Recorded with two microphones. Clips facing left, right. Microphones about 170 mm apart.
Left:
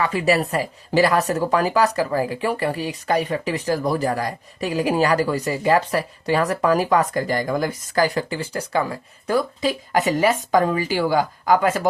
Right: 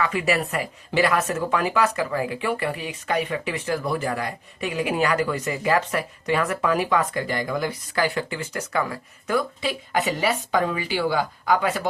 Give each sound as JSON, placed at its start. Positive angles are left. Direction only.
{"t": 0.0, "sound": "speech", "side_deg": 35}